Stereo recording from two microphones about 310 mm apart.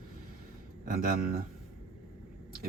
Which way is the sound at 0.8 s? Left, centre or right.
Right.